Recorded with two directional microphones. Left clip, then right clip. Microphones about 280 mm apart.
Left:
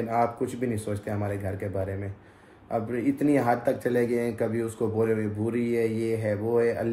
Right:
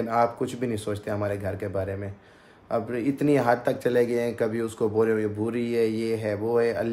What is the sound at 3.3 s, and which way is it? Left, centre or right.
Speech, centre.